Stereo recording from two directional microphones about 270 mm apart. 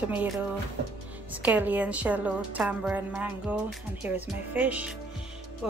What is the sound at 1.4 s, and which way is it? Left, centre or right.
A woman's voice, centre.